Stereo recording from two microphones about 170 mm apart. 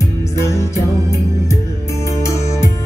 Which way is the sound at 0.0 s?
15° left (ahead or behind).